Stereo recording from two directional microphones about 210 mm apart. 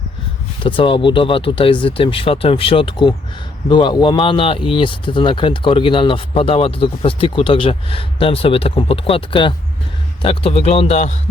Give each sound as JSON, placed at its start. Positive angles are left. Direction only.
{"t": 0.6, "sound": "speech", "side_deg": 25}